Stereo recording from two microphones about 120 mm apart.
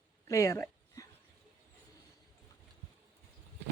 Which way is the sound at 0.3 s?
25° left (ahead or behind).